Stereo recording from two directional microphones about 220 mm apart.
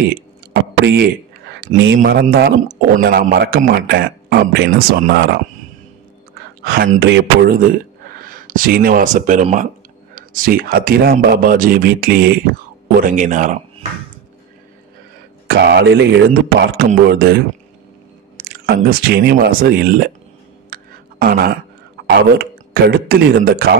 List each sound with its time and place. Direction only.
0.5 s a sound: 50° right (ahead or behind)
2.0 s a man's voice: 45° right (ahead or behind)
6.6 s a man's voice: 45° right (ahead or behind)
15.4 s a man's voice: 45° right (ahead or behind)
18.9 s a man's voice: 45° right (ahead or behind)
20.7 s a sound: 45° right (ahead or behind)
22.1 s a man's voice: 45° right (ahead or behind)